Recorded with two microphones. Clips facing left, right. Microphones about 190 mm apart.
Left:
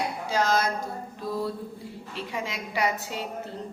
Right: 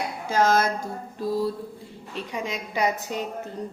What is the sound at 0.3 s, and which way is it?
Speech, 50° right (ahead or behind).